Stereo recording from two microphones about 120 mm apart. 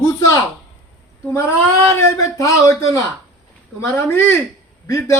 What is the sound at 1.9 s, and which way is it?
A man's voice, 20° left (ahead or behind).